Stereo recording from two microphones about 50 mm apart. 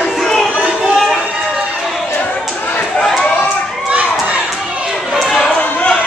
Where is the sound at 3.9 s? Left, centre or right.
Right.